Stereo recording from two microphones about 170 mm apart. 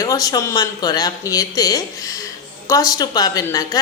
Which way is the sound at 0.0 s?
20° left (ahead or behind).